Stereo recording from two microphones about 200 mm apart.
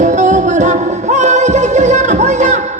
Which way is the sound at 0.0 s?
35° right (ahead or behind).